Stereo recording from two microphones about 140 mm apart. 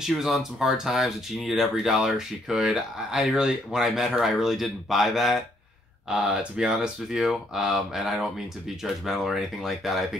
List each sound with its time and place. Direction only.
0.0 s speech: 5° right (ahead or behind)